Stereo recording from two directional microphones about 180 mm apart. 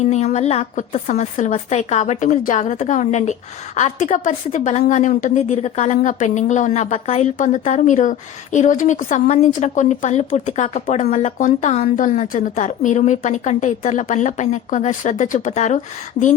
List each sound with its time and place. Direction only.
0.0 s a woman's voice: 40° left (ahead or behind)